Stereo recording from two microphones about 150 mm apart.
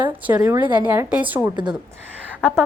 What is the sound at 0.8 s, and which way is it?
Speech, 10° right (ahead or behind).